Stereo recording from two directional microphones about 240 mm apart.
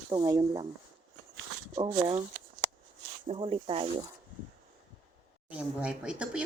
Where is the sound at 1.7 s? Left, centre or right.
Right.